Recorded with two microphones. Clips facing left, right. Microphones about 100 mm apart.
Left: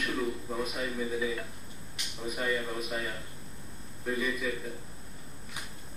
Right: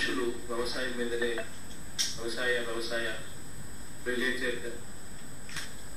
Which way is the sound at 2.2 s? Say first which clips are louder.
Even; 10° left (ahead or behind).